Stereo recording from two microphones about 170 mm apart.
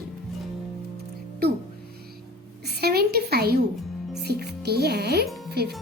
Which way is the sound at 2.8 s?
65° right (ahead or behind).